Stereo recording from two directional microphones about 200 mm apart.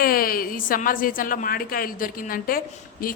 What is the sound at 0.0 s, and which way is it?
A woman's voice, 45° left (ahead or behind).